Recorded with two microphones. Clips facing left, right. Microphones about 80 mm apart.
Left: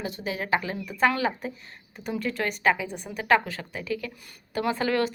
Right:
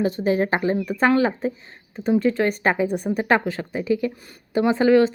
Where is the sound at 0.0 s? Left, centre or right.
Right.